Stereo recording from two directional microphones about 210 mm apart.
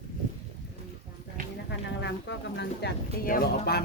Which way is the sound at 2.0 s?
55° left (ahead or behind).